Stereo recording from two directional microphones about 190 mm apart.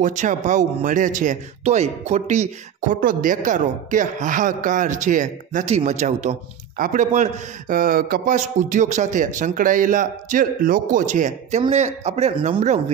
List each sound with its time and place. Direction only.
0.0 s a man's voice: 40° right (ahead or behind)